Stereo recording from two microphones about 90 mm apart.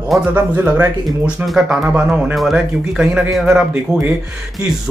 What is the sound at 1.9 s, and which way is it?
A man's voice, 15° right (ahead or behind).